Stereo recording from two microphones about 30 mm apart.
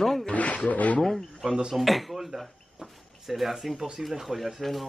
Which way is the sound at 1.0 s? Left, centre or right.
Centre.